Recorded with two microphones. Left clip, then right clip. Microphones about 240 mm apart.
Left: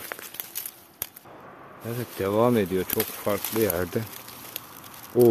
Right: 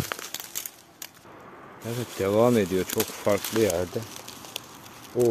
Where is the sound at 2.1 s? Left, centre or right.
Centre.